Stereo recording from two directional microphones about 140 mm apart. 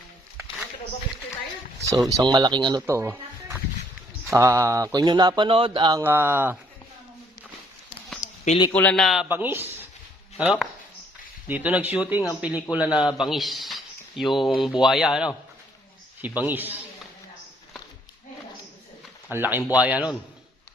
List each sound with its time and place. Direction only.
1.9 s speech: 25° right (ahead or behind)
2.8 s music: 20° right (ahead or behind)
4.3 s speech: 20° right (ahead or behind); by 6.0 s 35° right (ahead or behind)
6.0 s speech: 15° right (ahead or behind)
8.7 s speech: 10° left (ahead or behind)
9.3 s speech: 15° right (ahead or behind)
10.3 s speech: 5° right (ahead or behind)
16.5 s speech: 15° right (ahead or behind)
19.3 s speech: 15° right (ahead or behind)